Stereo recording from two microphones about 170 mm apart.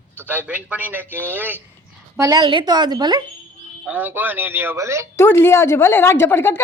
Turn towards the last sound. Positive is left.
turn(degrees=15)  # may be behind; listen again after turning